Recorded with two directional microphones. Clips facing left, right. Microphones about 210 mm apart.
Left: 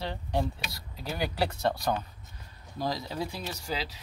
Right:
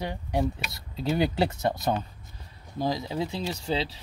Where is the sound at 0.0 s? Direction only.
15° right (ahead or behind).